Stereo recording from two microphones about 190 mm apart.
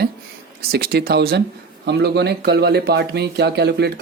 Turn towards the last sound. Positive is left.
turn(degrees=-60)  # may be behind; listen again after turning